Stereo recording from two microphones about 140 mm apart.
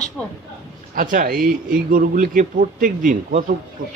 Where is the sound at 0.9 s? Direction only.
75° right (ahead or behind).